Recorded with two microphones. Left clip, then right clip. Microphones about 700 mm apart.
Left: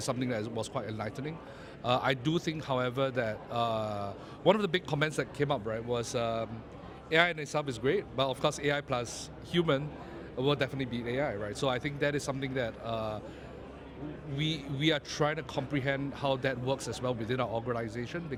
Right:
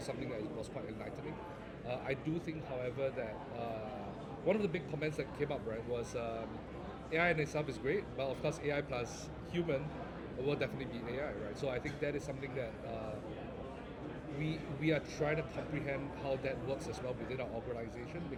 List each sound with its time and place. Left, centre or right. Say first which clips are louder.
0.0 s speech: left 8 dB; left
14.4 s speech: left 7 dB; left